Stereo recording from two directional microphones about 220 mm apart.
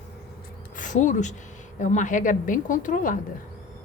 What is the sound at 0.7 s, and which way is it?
A woman's voice, 35° left (ahead or behind).